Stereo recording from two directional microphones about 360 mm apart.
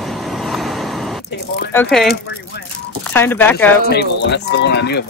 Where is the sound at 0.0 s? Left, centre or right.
Centre.